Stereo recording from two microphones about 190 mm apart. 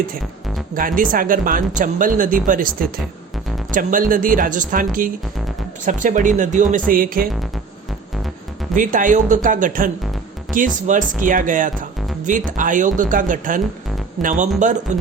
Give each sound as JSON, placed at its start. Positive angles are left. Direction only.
{"t": 0.7, "sound": "speech", "side_deg": -45}
{"t": 8.7, "sound": "speech", "side_deg": -45}